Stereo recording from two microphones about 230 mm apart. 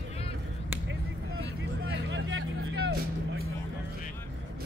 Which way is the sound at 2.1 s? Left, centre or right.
Right.